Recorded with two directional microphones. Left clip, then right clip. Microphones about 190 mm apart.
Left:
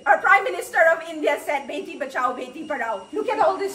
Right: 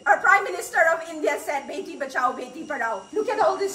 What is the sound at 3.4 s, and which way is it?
Speech, 20° left (ahead or behind).